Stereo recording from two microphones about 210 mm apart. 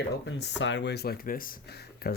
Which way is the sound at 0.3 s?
60° left (ahead or behind).